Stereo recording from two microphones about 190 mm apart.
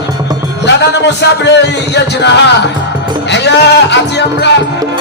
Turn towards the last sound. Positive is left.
turn(degrees=65)  # may be behind; listen again after turning